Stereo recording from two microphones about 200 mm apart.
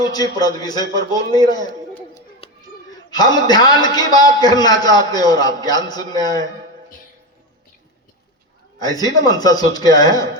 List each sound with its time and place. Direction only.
0.0 s a man's voice: 20° left (ahead or behind)
2.4 s a sound: 30° left (ahead or behind)
3.1 s a man's voice: 20° left (ahead or behind)
8.8 s a man's voice: 20° left (ahead or behind)